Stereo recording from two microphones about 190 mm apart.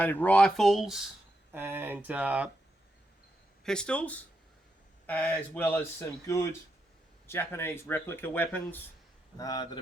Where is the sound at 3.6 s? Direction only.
5° left (ahead or behind).